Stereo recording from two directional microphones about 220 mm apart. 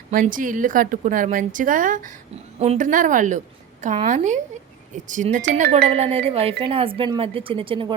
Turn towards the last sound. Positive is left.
turn(degrees=-25)  # may be behind; listen again after turning